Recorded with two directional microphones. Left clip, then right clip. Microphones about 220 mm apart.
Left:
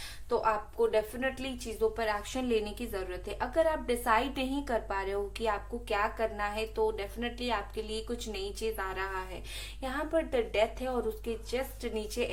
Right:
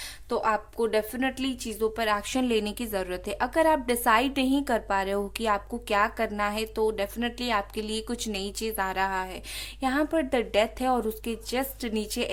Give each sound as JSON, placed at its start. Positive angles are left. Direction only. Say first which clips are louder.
{"t": 0.3, "sound": "a woman's voice", "louder": "right 3 dB", "side_deg": -50}